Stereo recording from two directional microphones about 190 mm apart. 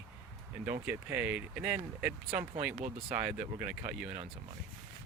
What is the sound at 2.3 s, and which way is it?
Speech, 40° right (ahead or behind).